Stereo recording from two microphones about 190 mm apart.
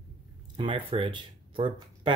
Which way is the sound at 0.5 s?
25° right (ahead or behind).